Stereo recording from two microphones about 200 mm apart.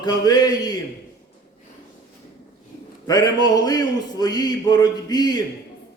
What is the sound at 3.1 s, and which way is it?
Speech, 20° left (ahead or behind).